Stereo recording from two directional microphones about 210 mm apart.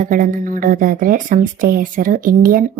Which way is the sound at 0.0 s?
40° right (ahead or behind).